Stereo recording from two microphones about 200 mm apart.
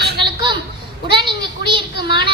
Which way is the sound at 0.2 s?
25° right (ahead or behind).